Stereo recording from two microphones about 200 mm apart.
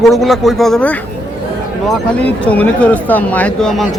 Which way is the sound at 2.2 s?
5° left (ahead or behind).